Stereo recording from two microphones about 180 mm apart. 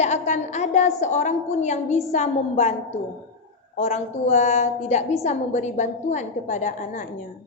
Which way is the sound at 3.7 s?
35° left (ahead or behind).